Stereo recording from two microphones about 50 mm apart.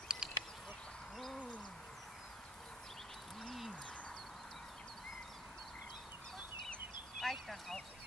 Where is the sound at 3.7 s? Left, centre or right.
Left.